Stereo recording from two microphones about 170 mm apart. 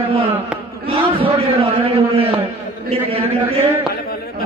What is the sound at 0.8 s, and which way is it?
A man's voice, 35° right (ahead or behind).